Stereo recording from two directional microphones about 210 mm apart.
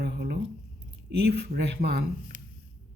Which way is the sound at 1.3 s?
50° right (ahead or behind).